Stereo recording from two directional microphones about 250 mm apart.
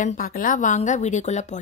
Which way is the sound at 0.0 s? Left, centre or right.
Left.